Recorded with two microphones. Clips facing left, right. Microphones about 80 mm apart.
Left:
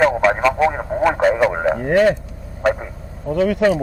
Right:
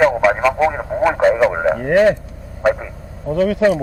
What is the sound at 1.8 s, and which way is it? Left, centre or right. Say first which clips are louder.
Speech: right 2 dB; centre.